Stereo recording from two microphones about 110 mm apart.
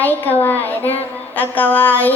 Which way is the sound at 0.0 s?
15° left (ahead or behind).